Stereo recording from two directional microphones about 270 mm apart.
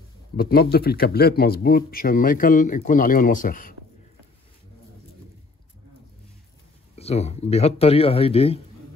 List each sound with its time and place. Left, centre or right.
0.4 s speech: left
7.0 s a man's voice: left